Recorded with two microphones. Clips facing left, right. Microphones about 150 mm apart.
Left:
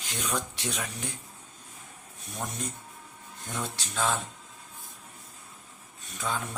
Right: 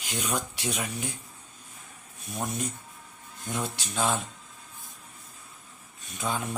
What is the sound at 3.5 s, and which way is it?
Speech, 10° right (ahead or behind).